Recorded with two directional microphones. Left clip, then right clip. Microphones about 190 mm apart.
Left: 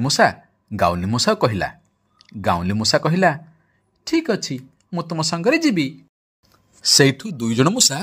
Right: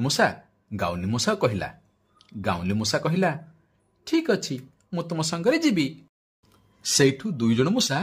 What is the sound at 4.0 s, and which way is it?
Speech, 20° left (ahead or behind).